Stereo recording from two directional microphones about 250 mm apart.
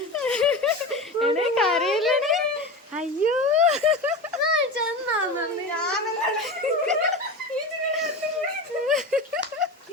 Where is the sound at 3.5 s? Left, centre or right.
Right.